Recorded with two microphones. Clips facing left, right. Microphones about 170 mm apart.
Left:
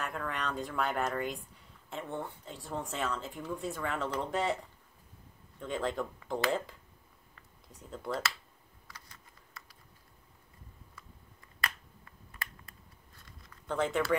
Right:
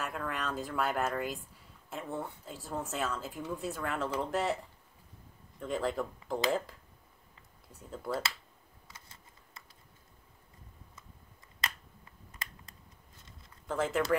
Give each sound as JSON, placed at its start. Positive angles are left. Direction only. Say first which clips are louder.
{"t": 0.0, "sound": "speech", "louder": "even", "side_deg": -5}
{"t": 5.6, "sound": "speech", "louder": "right 1 dB", "side_deg": 0}
{"t": 8.8, "sound": "typing", "louder": "left 1 dB", "side_deg": -25}
{"t": 13.1, "sound": "a sound", "louder": "left 2 dB", "side_deg": -25}
{"t": 13.7, "sound": "speech", "louder": "even", "side_deg": 0}